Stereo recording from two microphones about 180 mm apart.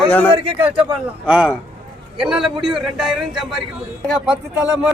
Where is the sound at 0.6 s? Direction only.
10° right (ahead or behind).